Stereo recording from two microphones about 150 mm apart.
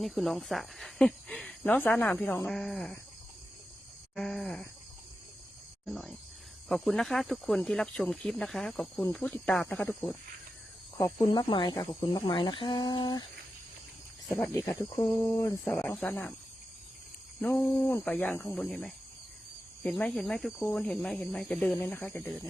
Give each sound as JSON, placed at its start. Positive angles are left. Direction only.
{"t": 0.0, "sound": "speech", "side_deg": 0}
{"t": 4.1, "sound": "speech", "side_deg": 0}
{"t": 5.8, "sound": "speech", "side_deg": 0}
{"t": 10.9, "sound": "speech", "side_deg": 25}
{"t": 14.3, "sound": "speech", "side_deg": 10}
{"t": 17.4, "sound": "speech", "side_deg": 15}